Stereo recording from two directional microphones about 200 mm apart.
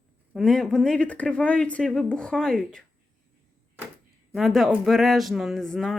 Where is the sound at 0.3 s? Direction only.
Centre (ahead or behind).